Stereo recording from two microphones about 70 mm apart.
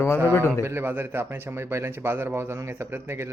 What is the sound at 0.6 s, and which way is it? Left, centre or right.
A man's voice, right.